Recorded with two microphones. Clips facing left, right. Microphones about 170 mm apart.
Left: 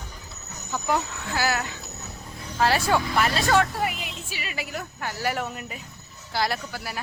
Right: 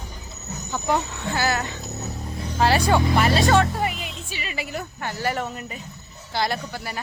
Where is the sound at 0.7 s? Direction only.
5° left (ahead or behind).